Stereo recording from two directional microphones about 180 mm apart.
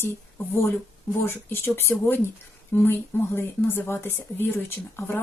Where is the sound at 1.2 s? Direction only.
10° left (ahead or behind).